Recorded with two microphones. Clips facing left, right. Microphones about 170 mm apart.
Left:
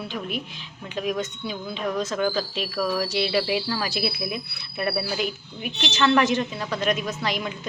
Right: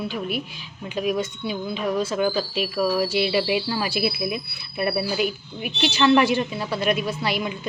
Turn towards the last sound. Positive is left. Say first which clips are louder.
# right 2 dB
turn(degrees=-10)  # may be behind; listen again after turning